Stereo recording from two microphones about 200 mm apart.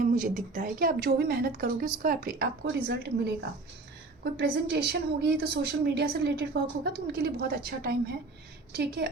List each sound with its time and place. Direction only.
0.0 s speech: 40° right (ahead or behind)
4.2 s a woman's voice: 50° right (ahead or behind)